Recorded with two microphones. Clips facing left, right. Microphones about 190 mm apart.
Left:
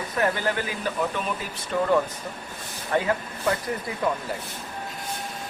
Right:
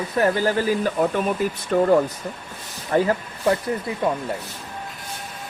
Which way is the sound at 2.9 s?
30° right (ahead or behind).